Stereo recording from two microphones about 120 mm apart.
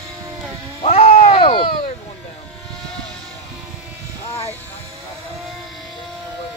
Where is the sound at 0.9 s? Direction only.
65° left (ahead or behind); by 1.7 s 45° left (ahead or behind).